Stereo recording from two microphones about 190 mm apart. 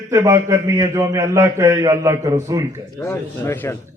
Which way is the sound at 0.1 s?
15° right (ahead or behind).